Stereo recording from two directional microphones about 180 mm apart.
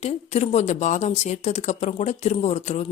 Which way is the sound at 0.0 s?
40° left (ahead or behind).